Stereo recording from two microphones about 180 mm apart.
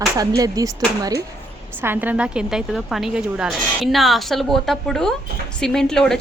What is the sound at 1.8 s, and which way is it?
A woman's voice, 10° right (ahead or behind).